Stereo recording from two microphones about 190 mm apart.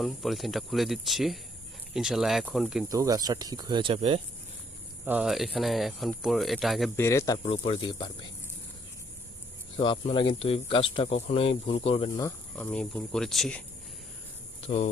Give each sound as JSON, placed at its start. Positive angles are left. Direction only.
{"t": 0.0, "sound": "speech", "side_deg": 0}
{"t": 2.9, "sound": "speech", "side_deg": -20}
{"t": 5.0, "sound": "speech", "side_deg": -5}
{"t": 6.9, "sound": "speech", "side_deg": 15}
{"t": 7.4, "sound": "speech", "side_deg": 30}
{"t": 9.7, "sound": "speech", "side_deg": 25}
{"t": 12.2, "sound": "speech", "side_deg": 10}
{"t": 14.6, "sound": "speech", "side_deg": 35}